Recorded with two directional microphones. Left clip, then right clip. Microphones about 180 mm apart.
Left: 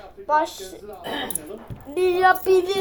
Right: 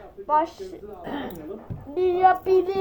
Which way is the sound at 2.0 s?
20° left (ahead or behind).